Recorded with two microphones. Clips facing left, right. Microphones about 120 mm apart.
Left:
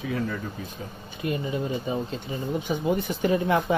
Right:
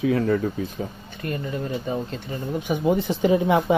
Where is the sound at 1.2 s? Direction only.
10° left (ahead or behind).